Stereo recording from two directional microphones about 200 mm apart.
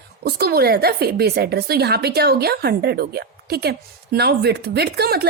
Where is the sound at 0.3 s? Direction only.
50° right (ahead or behind).